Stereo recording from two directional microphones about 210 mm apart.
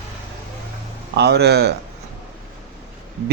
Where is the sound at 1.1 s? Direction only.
50° right (ahead or behind).